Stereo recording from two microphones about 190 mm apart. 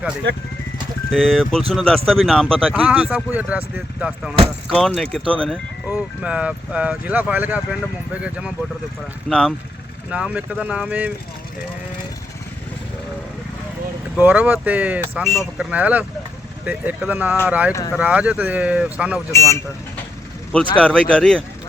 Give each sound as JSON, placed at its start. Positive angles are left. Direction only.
{"t": 1.1, "sound": "speech", "side_deg": 0}
{"t": 14.2, "sound": "speech", "side_deg": -10}
{"t": 17.7, "sound": "speech", "side_deg": 15}
{"t": 17.9, "sound": "speech", "side_deg": -5}
{"t": 19.3, "sound": "speech", "side_deg": 15}